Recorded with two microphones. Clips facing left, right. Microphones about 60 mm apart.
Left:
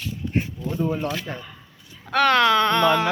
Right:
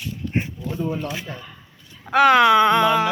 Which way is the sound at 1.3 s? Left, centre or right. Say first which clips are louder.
Left 2 dB; left.